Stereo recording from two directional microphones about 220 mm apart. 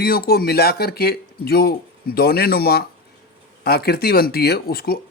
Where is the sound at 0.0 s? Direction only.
45° left (ahead or behind).